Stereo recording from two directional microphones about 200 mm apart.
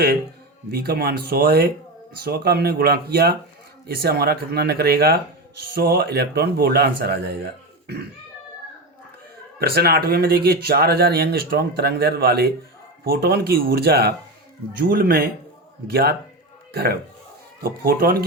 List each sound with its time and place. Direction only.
0.7 s speech: 50° right (ahead or behind)
9.6 s speech: 50° right (ahead or behind)